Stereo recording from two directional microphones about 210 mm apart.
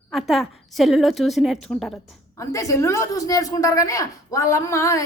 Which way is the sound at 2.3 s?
15° left (ahead or behind).